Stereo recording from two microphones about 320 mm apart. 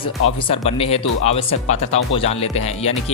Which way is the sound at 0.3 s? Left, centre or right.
Centre.